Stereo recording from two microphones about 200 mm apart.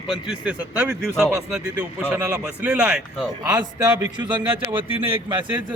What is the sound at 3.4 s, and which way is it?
Speech, 20° right (ahead or behind).